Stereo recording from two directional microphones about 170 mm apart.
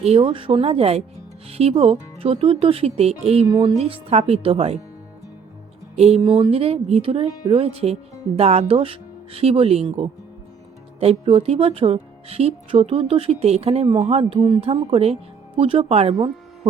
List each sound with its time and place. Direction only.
0.0 s speech: 35° right (ahead or behind)
3.5 s speech: 20° right (ahead or behind)
3.8 s speech: 35° right (ahead or behind)
6.0 s speech: 35° right (ahead or behind)